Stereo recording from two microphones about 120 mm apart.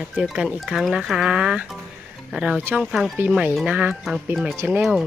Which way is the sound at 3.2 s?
10° right (ahead or behind).